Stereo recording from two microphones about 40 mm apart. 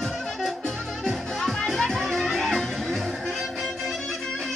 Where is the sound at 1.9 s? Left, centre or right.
Centre.